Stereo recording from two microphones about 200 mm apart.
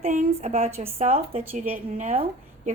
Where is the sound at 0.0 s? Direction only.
40° right (ahead or behind).